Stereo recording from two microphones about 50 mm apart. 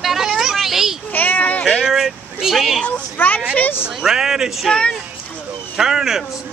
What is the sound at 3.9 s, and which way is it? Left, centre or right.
Speech, centre.